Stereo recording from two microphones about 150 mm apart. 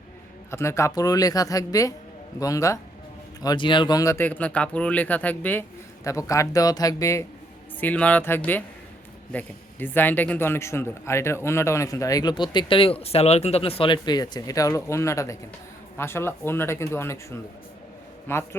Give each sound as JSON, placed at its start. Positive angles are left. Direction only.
{"t": 0.5, "sound": "a man's voice", "side_deg": 20}